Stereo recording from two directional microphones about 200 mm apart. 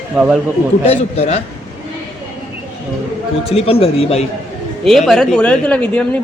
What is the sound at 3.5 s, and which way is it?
Speech, 30° left (ahead or behind).